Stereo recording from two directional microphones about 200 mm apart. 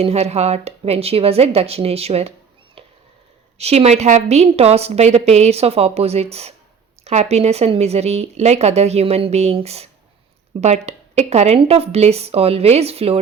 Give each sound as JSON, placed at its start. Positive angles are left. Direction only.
{"t": 0.0, "sound": "speech", "side_deg": -30}
{"t": 3.6, "sound": "speech", "side_deg": -30}